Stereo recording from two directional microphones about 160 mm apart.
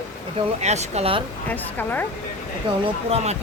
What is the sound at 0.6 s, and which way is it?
Speech, 45° right (ahead or behind).